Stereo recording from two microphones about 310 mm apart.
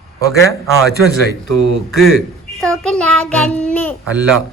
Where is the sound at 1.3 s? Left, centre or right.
Right.